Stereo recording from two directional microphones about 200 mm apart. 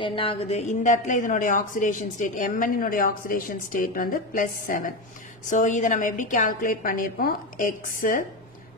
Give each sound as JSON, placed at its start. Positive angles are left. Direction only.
{"t": 0.0, "sound": "a woman's voice", "side_deg": 25}